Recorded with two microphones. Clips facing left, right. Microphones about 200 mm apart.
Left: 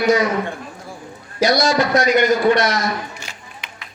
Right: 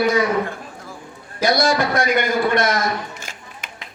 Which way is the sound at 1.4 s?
55° right (ahead or behind).